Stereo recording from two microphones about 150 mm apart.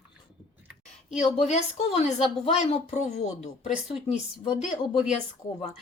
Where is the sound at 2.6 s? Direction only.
45° left (ahead or behind).